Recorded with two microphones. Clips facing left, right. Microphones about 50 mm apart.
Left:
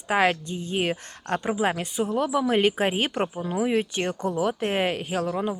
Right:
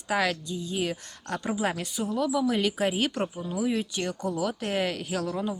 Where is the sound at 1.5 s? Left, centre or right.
Left.